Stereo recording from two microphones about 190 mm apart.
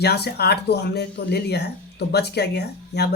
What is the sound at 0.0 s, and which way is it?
Speech, 60° left (ahead or behind).